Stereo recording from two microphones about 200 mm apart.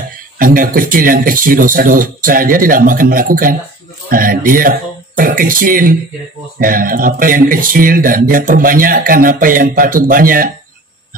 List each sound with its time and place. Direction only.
0.4 s speech: 45° right (ahead or behind)